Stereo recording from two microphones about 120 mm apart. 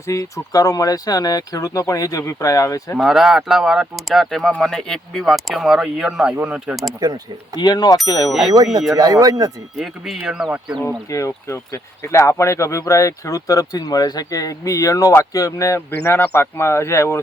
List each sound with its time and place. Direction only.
0.0 s speech: 25° left (ahead or behind)
3.0 s speech: centre (ahead or behind)
7.5 s speech: 35° left (ahead or behind)
8.9 s speech: 30° right (ahead or behind)
9.7 s speech: centre (ahead or behind)
10.8 s speech: 25° left (ahead or behind)